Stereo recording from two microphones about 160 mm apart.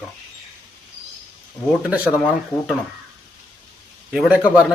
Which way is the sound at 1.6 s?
10° left (ahead or behind).